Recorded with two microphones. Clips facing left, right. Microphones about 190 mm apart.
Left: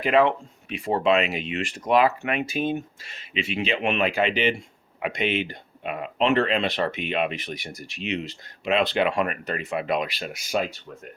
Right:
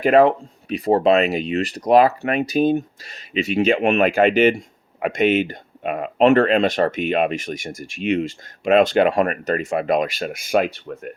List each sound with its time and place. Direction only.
0.0 s speech: 45° right (ahead or behind); by 11.1 s 60° right (ahead or behind)